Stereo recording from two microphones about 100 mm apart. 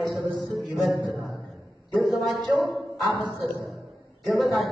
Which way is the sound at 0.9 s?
35° right (ahead or behind).